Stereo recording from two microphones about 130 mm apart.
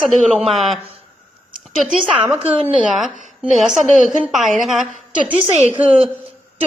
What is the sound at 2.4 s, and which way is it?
Speech, 50° right (ahead or behind).